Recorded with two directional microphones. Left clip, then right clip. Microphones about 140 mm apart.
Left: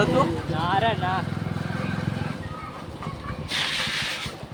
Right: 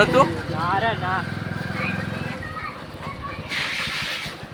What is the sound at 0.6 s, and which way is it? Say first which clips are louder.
Speech: right 1 dB; 15° left (ahead or behind).